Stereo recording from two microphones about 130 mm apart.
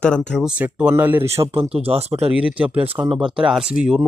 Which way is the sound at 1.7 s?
50° right (ahead or behind).